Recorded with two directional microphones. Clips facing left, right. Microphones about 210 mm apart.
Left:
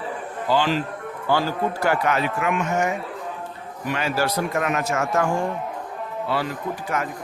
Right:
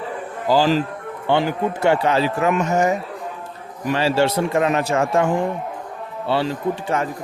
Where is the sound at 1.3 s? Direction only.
20° right (ahead or behind).